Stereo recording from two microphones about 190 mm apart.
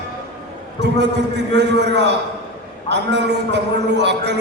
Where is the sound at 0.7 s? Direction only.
65° right (ahead or behind).